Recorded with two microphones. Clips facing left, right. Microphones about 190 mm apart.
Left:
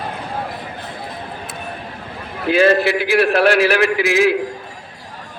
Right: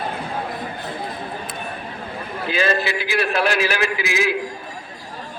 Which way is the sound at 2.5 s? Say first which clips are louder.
Left 8 dB; 65° left (ahead or behind).